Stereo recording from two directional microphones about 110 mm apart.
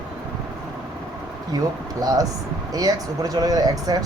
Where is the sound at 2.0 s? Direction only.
35° right (ahead or behind).